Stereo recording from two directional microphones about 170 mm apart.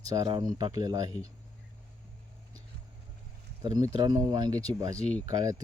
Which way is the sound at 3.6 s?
25° right (ahead or behind).